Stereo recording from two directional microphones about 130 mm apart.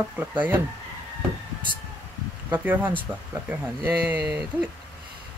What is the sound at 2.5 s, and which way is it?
Speech, 15° right (ahead or behind).